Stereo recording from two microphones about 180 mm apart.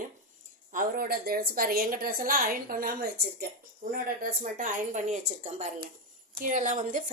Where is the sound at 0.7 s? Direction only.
50° right (ahead or behind).